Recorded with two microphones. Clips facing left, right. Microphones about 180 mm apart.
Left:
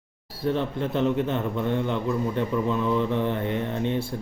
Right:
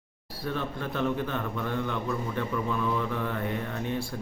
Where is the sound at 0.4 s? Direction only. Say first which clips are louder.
Left 7 dB; 25° left (ahead or behind).